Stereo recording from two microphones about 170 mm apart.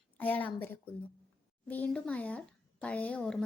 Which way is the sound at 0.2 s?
10° left (ahead or behind).